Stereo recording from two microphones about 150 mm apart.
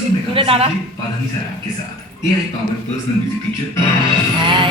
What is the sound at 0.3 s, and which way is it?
Speech, 40° right (ahead or behind).